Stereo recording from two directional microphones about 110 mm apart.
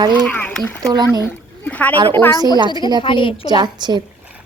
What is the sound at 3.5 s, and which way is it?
Speech, 40° right (ahead or behind).